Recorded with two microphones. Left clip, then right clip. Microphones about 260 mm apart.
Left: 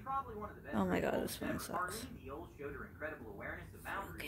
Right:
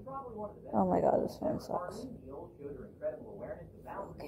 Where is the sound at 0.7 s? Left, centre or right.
Left.